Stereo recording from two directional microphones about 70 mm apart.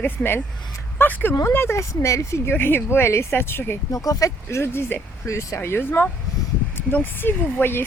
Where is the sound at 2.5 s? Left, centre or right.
Left.